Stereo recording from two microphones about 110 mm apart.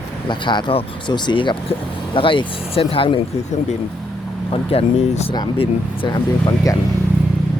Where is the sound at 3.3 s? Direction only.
65° left (ahead or behind).